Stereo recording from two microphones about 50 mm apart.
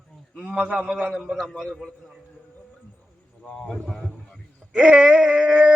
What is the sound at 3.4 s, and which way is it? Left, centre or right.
Speech, centre.